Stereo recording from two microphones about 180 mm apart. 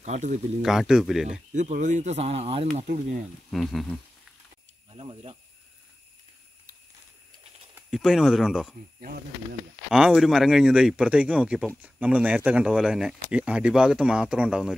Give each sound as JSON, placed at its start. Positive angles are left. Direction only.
{"t": 0.0, "sound": "speech", "side_deg": -40}
{"t": 0.6, "sound": "speech", "side_deg": -5}
{"t": 1.5, "sound": "speech", "side_deg": -45}
{"t": 3.4, "sound": "speech", "side_deg": 0}
{"t": 4.9, "sound": "speech", "side_deg": -30}
{"t": 7.7, "sound": "speech", "side_deg": -5}
{"t": 9.0, "sound": "speech", "side_deg": -60}
{"t": 9.8, "sound": "speech", "side_deg": -5}